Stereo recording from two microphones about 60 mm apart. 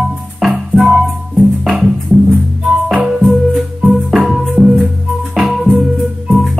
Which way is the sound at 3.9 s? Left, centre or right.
Centre.